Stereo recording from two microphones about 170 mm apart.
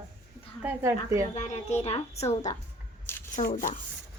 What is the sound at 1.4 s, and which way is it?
A child's voice, 40° left (ahead or behind).